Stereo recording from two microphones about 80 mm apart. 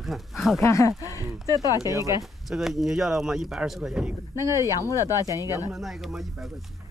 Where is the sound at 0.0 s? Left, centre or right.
Centre.